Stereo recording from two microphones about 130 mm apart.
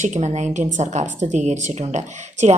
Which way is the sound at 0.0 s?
65° right (ahead or behind).